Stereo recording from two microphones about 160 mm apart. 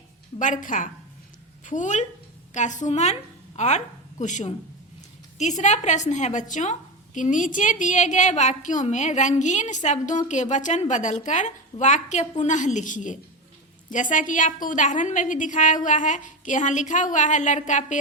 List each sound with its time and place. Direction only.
0.3 s a woman's voice: 55° left (ahead or behind)